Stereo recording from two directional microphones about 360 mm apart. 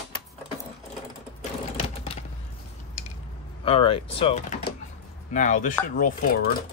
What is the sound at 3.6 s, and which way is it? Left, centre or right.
Speech, centre.